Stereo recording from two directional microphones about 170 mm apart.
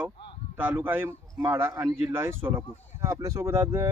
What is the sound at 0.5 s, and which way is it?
A man's voice, 10° right (ahead or behind).